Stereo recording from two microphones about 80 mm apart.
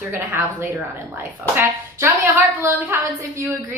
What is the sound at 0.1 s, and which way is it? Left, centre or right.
Speech, right.